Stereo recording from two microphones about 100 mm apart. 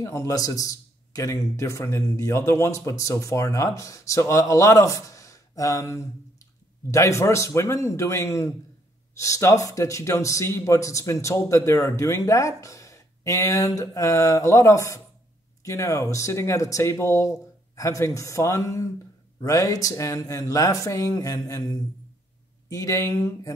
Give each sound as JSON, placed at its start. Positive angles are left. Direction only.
{"t": 0.0, "sound": "a man's voice", "side_deg": 30}
{"t": 22.7, "sound": "a man's voice", "side_deg": 35}